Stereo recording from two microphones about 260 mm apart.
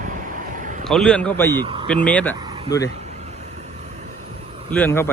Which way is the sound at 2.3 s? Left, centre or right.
Centre.